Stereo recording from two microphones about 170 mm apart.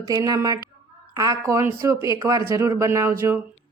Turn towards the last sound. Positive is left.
turn(degrees=-15)  # may be behind; listen again after turning